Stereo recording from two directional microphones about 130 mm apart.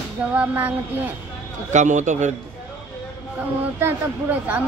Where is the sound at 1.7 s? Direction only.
70° right (ahead or behind).